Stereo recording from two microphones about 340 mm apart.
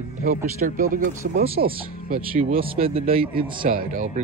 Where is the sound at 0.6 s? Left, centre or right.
Right.